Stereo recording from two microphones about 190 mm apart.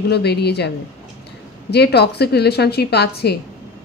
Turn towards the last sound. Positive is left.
turn(degrees=60)  # may be behind; listen again after turning